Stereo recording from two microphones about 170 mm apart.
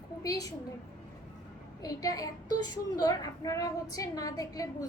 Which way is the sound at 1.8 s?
20° left (ahead or behind).